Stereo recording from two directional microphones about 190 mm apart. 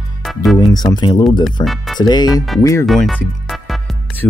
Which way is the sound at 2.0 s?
20° left (ahead or behind).